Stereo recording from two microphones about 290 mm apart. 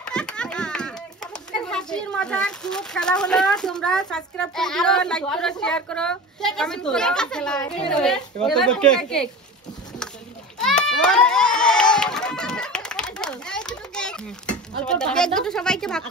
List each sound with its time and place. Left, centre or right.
0.0 s a child's voice: centre
10.6 s a sound: centre
14.9 s a child's voice: centre